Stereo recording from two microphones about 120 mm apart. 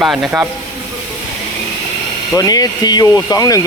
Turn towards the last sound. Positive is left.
turn(degrees=30)  # may be behind; listen again after turning